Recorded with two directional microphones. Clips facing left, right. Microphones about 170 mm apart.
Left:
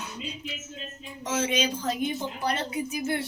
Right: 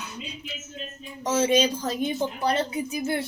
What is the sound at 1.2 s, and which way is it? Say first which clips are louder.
A woman's voice: right 6 dB; 35° right (ahead or behind).